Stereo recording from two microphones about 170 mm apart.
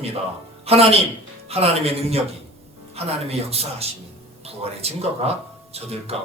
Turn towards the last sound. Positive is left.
turn(degrees=-35)  # may be behind; listen again after turning